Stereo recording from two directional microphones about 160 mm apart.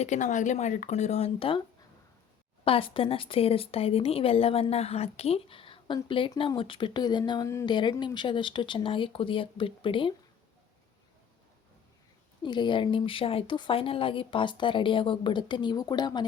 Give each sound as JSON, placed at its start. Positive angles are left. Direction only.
{"t": 0.0, "sound": "speech", "side_deg": 50}
{"t": 2.6, "sound": "speech", "side_deg": 35}
{"t": 12.4, "sound": "speech", "side_deg": 30}